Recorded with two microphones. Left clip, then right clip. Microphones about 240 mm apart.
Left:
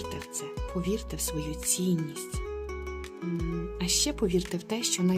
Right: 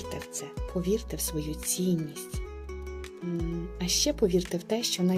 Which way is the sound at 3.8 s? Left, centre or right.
Centre.